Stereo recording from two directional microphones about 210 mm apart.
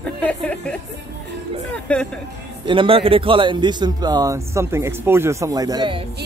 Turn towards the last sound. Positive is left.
turn(degrees=-20)  # may be behind; listen again after turning